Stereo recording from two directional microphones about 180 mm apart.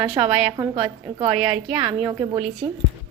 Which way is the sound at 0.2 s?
20° right (ahead or behind).